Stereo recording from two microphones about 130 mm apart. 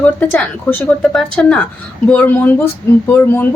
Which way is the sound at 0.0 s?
15° left (ahead or behind).